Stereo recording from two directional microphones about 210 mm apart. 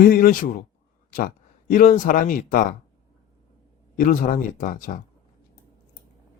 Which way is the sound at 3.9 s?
40° left (ahead or behind).